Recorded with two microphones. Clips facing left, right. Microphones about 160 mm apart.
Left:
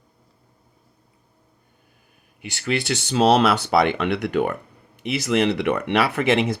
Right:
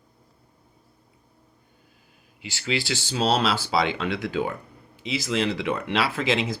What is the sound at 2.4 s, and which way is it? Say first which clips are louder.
Speech: left 3 dB; 60° left (ahead or behind).